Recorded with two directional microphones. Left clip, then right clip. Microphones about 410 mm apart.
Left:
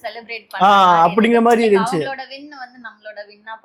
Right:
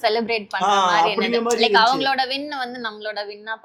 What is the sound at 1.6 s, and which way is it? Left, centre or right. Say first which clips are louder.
A woman's voice: even; right.